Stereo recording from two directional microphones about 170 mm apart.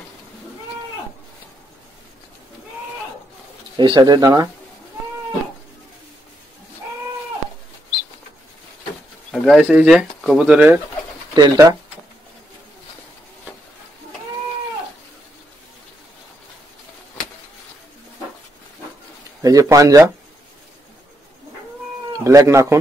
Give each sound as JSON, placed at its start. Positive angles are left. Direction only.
{"t": 3.7, "sound": "speech", "side_deg": -25}
{"t": 9.3, "sound": "speech", "side_deg": 0}
{"t": 11.3, "sound": "speech", "side_deg": -20}
{"t": 19.4, "sound": "speech", "side_deg": -20}
{"t": 22.1, "sound": "speech", "side_deg": -20}